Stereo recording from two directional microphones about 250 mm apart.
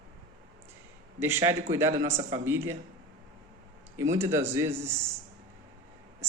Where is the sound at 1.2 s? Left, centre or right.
Centre.